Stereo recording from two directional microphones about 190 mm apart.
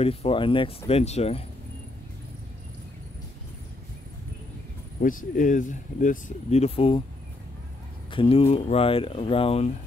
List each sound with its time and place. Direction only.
0.0 s speech: 30° left (ahead or behind)
5.0 s speech: 45° left (ahead or behind)
8.1 s speech: 30° left (ahead or behind)